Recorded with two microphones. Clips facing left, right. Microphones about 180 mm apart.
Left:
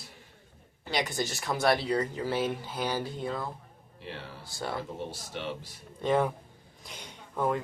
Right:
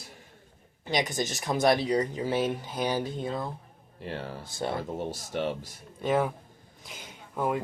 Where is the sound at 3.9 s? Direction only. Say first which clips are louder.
Right 6 dB; 45° right (ahead or behind).